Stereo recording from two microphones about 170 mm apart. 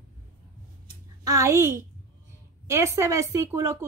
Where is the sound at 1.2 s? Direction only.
20° right (ahead or behind).